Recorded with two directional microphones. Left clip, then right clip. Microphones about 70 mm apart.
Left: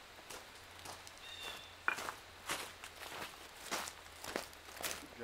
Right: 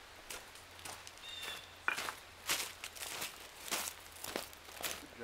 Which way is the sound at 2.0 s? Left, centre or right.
Right.